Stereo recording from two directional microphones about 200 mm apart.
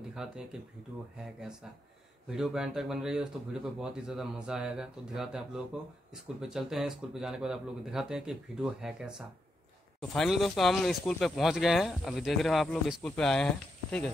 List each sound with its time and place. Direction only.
0.1 s speech: 5° right (ahead or behind)
2.3 s speech: centre (ahead or behind)